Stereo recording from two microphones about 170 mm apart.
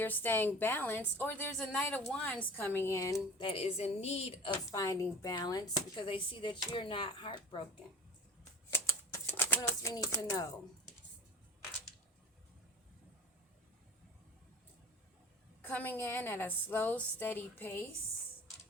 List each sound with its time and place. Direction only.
0.0 s a woman's voice: 10° left (ahead or behind); by 4.5 s 35° left (ahead or behind)
4.7 s speech: 20° left (ahead or behind)
8.7 s typewriter: 15° left (ahead or behind)
15.6 s a woman's voice: 10° left (ahead or behind)